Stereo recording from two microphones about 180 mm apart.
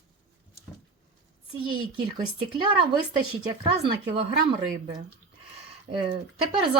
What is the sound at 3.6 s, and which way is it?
Speech, 30° right (ahead or behind).